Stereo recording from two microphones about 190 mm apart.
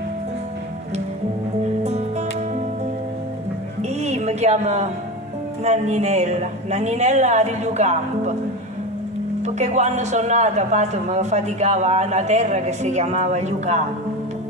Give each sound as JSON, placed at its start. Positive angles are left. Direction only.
{"t": 1.8, "sound": "music", "side_deg": -35}
{"t": 4.0, "sound": "a sound", "side_deg": -35}
{"t": 5.6, "sound": "a man's voice", "side_deg": -35}
{"t": 9.4, "sound": "a man's voice", "side_deg": -35}